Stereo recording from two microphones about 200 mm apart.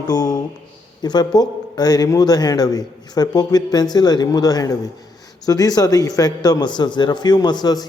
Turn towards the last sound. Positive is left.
turn(degrees=20)  # may be behind; listen again after turning